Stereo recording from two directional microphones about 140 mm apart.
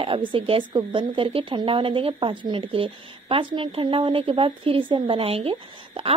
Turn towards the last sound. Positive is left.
turn(degrees=-40)  # may be behind; listen again after turning